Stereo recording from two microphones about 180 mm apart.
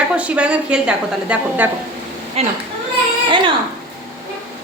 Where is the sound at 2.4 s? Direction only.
35° right (ahead or behind).